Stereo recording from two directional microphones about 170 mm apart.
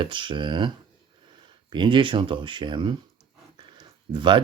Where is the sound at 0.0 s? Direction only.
30° right (ahead or behind).